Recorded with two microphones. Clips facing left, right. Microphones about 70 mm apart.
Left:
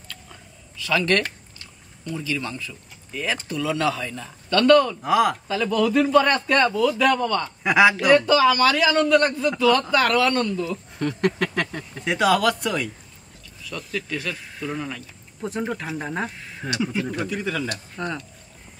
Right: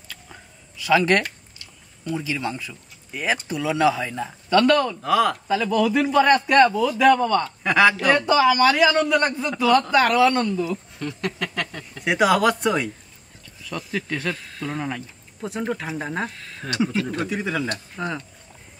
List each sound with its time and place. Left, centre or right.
0.1 s a sound: centre
2.0 s speech: right
5.0 s speech: centre
5.5 s speech: centre
6.5 s speech: right
7.4 s speech: centre
8.1 s a man's voice: right
11.0 s speech: left
11.5 s speech: left
12.0 s a man's voice: centre
13.7 s speech: right
15.4 s speech: centre
16.3 s speech: centre
17.3 s a man's voice: centre